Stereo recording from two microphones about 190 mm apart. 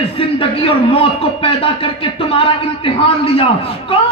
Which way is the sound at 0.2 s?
30° left (ahead or behind).